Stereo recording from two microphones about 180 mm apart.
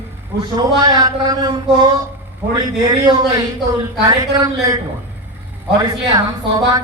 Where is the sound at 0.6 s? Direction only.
20° right (ahead or behind).